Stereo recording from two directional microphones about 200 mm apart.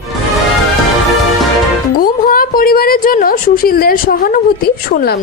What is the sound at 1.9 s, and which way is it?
A woman's voice, 45° left (ahead or behind).